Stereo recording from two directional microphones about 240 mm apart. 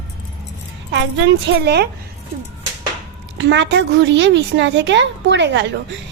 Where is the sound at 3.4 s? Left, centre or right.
Right.